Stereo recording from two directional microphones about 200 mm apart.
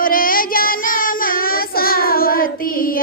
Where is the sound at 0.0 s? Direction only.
45° left (ahead or behind).